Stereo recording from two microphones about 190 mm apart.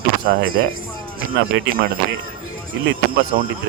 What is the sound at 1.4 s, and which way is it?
Speech, 65° right (ahead or behind).